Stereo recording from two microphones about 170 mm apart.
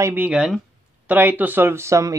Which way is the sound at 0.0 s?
10° right (ahead or behind).